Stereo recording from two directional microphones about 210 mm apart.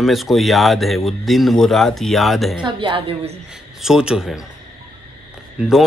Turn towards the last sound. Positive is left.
turn(degrees=0)  # may be behind; listen again after turning